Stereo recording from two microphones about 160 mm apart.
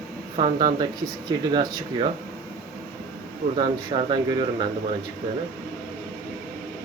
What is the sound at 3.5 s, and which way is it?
Speech, 35° right (ahead or behind).